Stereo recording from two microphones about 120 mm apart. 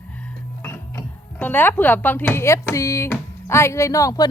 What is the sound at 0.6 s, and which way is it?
Speech, 15° left (ahead or behind).